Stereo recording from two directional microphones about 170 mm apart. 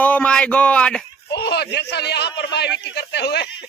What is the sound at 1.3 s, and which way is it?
A man's voice, 85° left.